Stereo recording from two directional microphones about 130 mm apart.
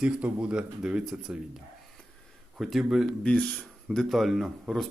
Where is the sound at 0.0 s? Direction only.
10° right (ahead or behind).